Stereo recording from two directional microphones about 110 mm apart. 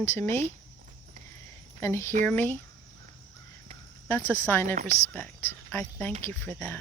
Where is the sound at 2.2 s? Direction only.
15° left (ahead or behind).